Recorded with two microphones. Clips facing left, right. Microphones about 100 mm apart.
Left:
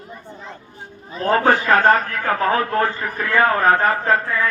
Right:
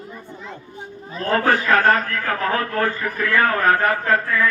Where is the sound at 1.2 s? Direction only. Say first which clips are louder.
Left 2 dB; 20° left (ahead or behind).